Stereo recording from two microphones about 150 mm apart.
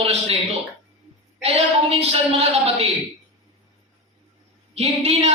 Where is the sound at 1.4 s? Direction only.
45° right (ahead or behind).